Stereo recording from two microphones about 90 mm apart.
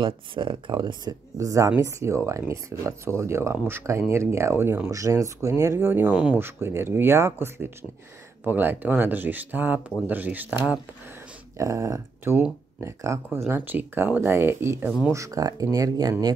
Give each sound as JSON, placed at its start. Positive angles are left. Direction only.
{"t": 0.0, "sound": "speech", "side_deg": -65}
{"t": 1.4, "sound": "speech", "side_deg": -35}
{"t": 11.5, "sound": "speech", "side_deg": -35}
{"t": 13.5, "sound": "speech", "side_deg": -20}
{"t": 15.1, "sound": "speech", "side_deg": -40}